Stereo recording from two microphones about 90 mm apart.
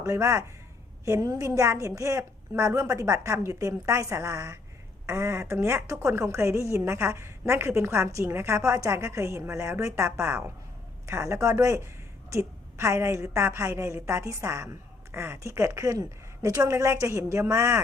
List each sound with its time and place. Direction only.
0.0 s a woman's voice: 35° right (ahead or behind)